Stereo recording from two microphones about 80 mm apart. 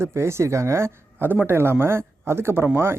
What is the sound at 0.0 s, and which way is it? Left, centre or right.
Speech, right.